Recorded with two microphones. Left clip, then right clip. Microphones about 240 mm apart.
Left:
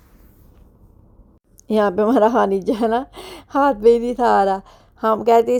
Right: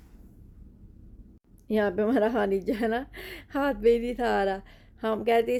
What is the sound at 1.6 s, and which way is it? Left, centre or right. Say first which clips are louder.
A woman's voice: left 9 dB; left.